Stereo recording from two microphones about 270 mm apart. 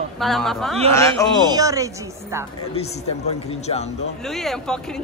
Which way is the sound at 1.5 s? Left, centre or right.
Centre.